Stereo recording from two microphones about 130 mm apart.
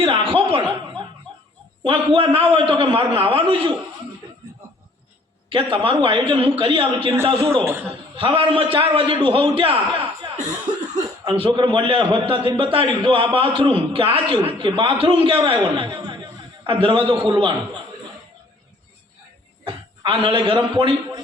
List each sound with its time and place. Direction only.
0.0 s chuckle: 45° right (ahead or behind)
1.8 s a man's voice: 45° right (ahead or behind)
5.5 s a man's voice: 40° right (ahead or behind)
7.6 s a man's voice: 20° right (ahead or behind)
7.9 s a man's voice: 45° right (ahead or behind)
10.8 s cough: 30° right (ahead or behind)
11.3 s a man's voice: 40° right (ahead or behind)
19.6 s a man's voice: 40° right (ahead or behind)